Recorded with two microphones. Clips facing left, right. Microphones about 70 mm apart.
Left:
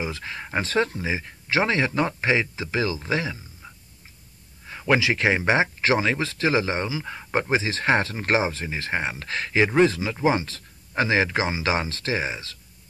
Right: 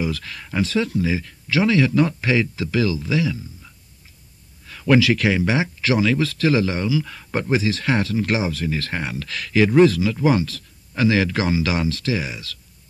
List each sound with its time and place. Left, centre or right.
0.0 s speech: left